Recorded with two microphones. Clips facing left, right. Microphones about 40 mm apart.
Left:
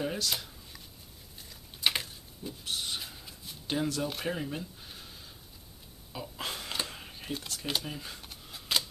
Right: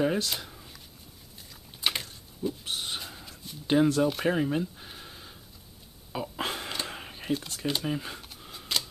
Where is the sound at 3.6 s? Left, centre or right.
Right.